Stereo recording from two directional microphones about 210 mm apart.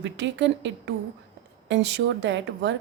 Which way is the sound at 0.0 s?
60° right (ahead or behind).